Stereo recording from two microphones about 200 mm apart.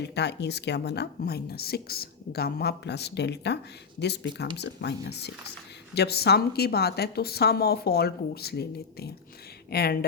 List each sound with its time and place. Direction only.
0.0 s a woman's voice: 60° left (ahead or behind)